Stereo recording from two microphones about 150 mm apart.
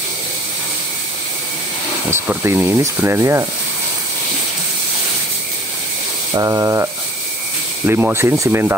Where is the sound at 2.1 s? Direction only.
15° right (ahead or behind).